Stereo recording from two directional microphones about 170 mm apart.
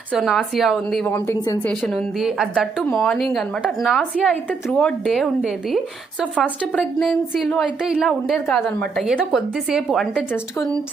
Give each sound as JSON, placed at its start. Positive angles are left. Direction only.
{"t": 0.1, "sound": "a woman's voice", "side_deg": 0}
{"t": 1.0, "sound": "speech", "side_deg": 15}
{"t": 1.8, "sound": "a woman's voice", "side_deg": 5}